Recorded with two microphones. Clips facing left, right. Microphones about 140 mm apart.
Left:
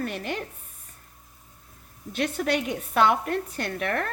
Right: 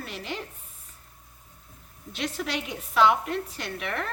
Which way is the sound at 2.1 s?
50° left (ahead or behind).